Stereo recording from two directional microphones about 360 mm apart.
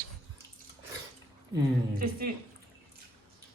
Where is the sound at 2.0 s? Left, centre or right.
Right.